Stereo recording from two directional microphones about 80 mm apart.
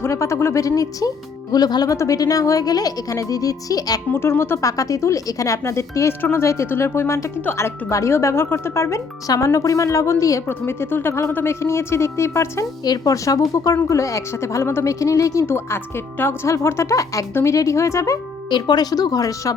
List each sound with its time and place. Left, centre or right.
0.0 s a woman's voice: left
4.1 s a woman's voice: left
10.5 s a woman's voice: left
12.8 s a woman's voice: left
18.5 s speech: left